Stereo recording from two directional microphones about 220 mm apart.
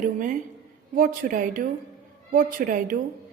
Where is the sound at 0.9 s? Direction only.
40° right (ahead or behind).